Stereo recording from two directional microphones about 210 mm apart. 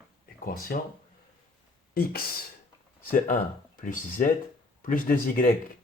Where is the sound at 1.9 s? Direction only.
45° left (ahead or behind).